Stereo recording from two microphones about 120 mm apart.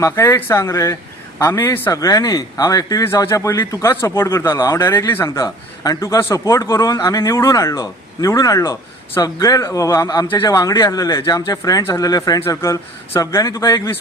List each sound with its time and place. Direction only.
0.0 s speech: 20° left (ahead or behind)